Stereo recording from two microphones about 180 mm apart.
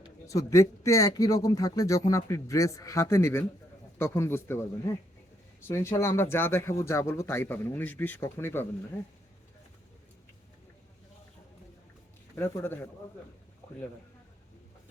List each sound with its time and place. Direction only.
0.3 s speech: 15° left (ahead or behind)
5.6 s speech: 15° left (ahead or behind)
12.4 s speech: 10° left (ahead or behind)